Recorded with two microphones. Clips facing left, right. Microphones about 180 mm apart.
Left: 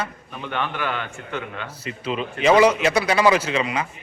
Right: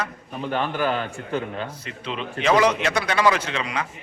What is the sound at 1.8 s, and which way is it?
A man's voice, 5° left (ahead or behind).